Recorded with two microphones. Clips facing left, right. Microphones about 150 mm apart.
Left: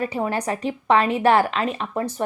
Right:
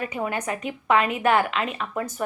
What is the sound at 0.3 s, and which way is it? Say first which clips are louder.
Speech: left 4 dB; 35° left (ahead or behind).